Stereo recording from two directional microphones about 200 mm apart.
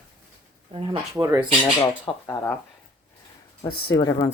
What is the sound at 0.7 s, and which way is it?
Speech, 25° right (ahead or behind).